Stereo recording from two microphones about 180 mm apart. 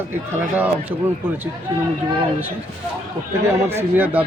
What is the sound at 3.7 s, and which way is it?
Speech, 10° right (ahead or behind).